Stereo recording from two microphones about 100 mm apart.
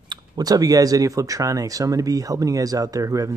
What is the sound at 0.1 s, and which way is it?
Speech, 40° right (ahead or behind).